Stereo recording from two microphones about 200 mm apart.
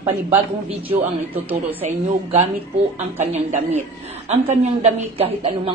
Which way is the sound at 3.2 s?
35° right (ahead or behind).